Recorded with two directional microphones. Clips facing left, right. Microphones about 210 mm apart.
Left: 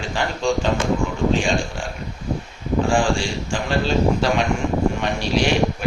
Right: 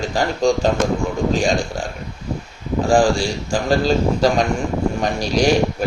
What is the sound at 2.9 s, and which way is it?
A man's voice, 40° right (ahead or behind).